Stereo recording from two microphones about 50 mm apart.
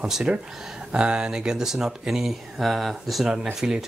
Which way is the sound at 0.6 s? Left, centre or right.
Centre.